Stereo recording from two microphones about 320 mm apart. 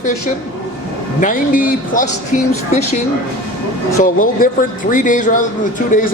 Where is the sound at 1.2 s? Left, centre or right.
Left.